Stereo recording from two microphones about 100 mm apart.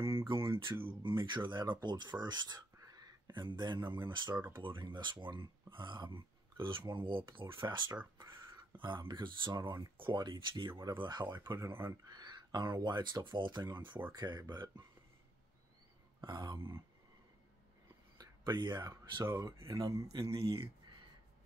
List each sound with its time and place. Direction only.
0.3 s speech: 55° right (ahead or behind)
11.5 s speech: 25° right (ahead or behind)
12.1 s speech: 45° right (ahead or behind)
16.2 s speech: 45° right (ahead or behind)
16.5 s speech: 25° right (ahead or behind)
18.1 s a sound: 40° right (ahead or behind)
19.1 s speech: 30° right (ahead or behind)